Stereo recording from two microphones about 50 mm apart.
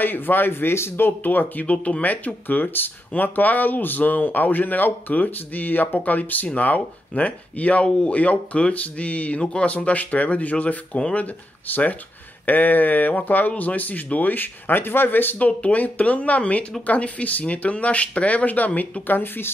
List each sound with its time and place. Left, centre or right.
0.0 s speech: left
15.3 s speech: left
19.0 s speech: left